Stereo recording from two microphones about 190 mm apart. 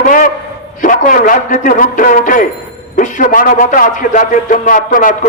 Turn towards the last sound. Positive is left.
turn(degrees=45)  # may be behind; listen again after turning